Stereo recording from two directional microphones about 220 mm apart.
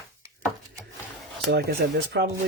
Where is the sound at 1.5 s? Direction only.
50° right (ahead or behind).